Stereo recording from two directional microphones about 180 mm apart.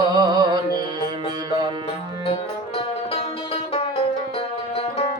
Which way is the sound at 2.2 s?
30° left (ahead or behind).